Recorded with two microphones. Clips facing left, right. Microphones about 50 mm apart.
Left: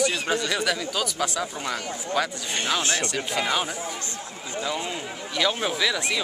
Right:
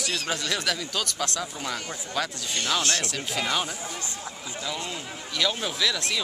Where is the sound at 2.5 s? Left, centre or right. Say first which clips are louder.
Left 1 dB; centre.